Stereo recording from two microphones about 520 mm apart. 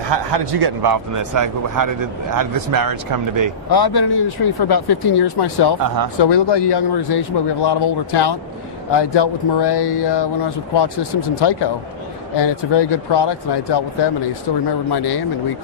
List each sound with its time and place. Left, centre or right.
0.1 s a man's voice: right
3.7 s speech: left